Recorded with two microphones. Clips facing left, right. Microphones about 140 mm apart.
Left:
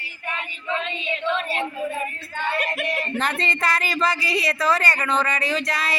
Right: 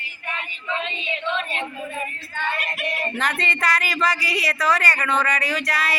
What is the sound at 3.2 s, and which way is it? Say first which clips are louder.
Speech: left 1 dB; 30° left (ahead or behind).